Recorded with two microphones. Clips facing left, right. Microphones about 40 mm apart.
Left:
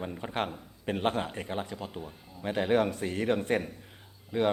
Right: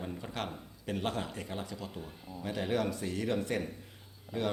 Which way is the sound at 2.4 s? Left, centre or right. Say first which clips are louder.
Left 6 dB; left.